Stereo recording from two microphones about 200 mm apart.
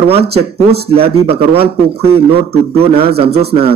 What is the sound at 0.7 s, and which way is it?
Speech, 30° right (ahead or behind).